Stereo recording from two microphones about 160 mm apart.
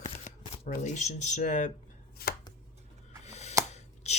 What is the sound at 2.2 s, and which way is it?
Chopping, 75° left (ahead or behind).